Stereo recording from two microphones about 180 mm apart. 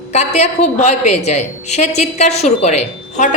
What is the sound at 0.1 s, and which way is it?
A woman's voice, 35° left (ahead or behind).